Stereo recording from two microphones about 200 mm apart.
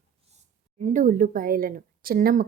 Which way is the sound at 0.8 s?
40° right (ahead or behind).